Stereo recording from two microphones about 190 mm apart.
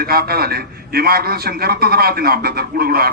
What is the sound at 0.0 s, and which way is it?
A man's voice, 55° right (ahead or behind).